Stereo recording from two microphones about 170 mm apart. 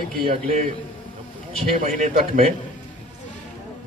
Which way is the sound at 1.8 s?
50° right (ahead or behind).